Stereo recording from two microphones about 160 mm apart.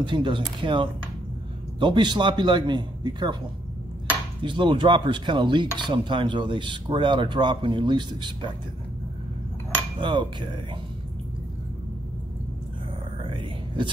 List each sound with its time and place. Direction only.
0.0 s speech: 30° right (ahead or behind)
4.4 s speech: 30° right (ahead or behind)
9.9 s a sound: 30° right (ahead or behind)
13.2 s whispering: 30° right (ahead or behind)